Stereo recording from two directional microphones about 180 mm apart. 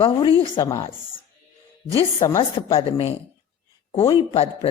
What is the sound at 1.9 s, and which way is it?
A woman's voice, 25° left (ahead or behind).